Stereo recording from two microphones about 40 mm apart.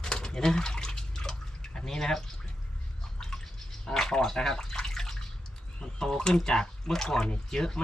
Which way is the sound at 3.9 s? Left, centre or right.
Centre.